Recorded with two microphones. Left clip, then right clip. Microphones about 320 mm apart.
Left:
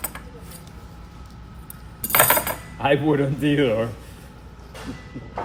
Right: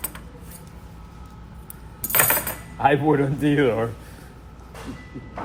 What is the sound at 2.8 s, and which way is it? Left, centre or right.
A man's voice, centre.